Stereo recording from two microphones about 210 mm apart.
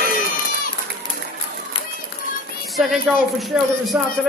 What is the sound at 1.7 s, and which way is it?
Run, 25° left (ahead or behind).